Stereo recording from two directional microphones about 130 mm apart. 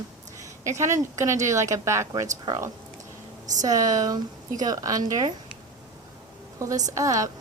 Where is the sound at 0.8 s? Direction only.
25° right (ahead or behind).